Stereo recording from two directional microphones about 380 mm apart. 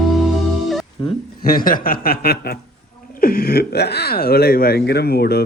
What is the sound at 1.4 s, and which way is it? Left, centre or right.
Speech, left.